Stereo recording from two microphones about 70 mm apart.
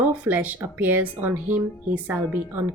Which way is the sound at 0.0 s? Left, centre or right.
Right.